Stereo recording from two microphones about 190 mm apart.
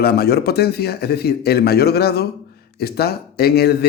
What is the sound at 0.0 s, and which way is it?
A man's voice, 55° left (ahead or behind).